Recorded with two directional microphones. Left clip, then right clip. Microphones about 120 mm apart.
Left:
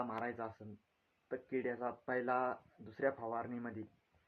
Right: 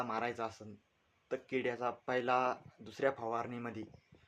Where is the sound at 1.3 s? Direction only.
30° right (ahead or behind).